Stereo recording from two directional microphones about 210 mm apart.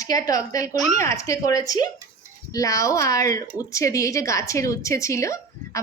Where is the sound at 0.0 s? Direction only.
15° left (ahead or behind).